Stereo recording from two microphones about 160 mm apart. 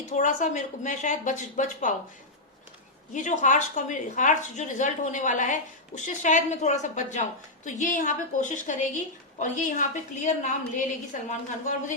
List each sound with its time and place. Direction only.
0.2 s a woman's voice: 50° left (ahead or behind)
3.1 s a woman's voice: 50° left (ahead or behind)